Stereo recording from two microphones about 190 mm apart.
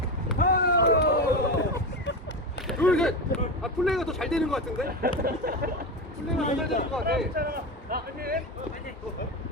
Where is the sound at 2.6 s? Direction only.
Centre (ahead or behind).